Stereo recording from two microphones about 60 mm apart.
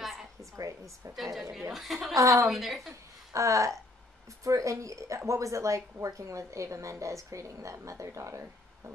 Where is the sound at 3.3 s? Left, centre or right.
Right.